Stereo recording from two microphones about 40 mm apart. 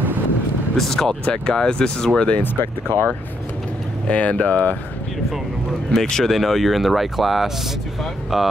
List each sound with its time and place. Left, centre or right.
0.7 s speech: centre
2.1 s speech: left
2.4 s speech: left
4.1 s speech: left
5.9 s speech: centre
6.3 s speech: centre